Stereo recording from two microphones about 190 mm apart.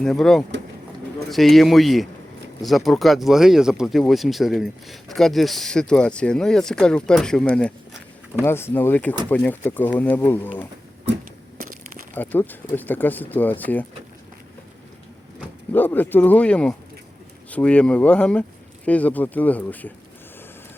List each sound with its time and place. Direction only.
0.0 s speech: 5° left (ahead or behind)
11.5 s crumpling: 45° right (ahead or behind)
12.1 s speech: 10° left (ahead or behind)
15.7 s speech: 10° left (ahead or behind)